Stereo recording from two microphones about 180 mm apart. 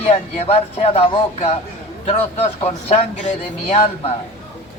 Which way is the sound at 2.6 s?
35° left (ahead or behind).